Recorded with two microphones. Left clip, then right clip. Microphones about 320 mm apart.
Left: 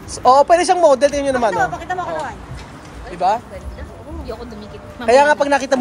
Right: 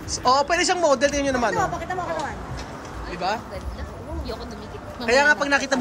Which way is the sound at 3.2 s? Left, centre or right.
Centre.